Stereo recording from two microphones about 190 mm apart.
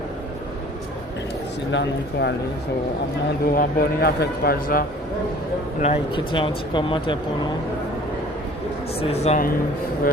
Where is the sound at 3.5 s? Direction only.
50° left (ahead or behind).